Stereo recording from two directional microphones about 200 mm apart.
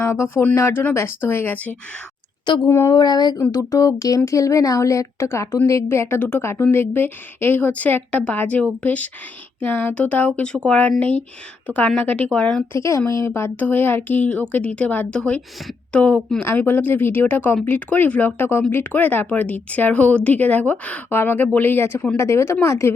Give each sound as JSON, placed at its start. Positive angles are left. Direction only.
{"t": 0.0, "sound": "a woman's voice", "side_deg": 15}